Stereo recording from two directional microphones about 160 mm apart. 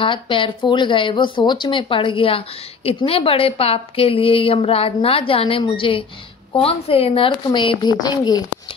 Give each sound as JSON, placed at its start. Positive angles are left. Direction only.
{"t": 0.0, "sound": "speech", "side_deg": 30}